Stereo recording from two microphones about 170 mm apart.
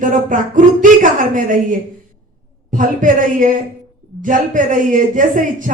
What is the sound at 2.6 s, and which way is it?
Speech, 50° right (ahead or behind).